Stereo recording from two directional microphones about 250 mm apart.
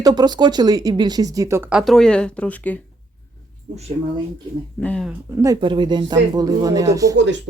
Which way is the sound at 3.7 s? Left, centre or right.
Right.